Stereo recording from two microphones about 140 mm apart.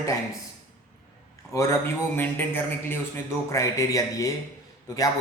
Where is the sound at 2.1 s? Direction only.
15° left (ahead or behind).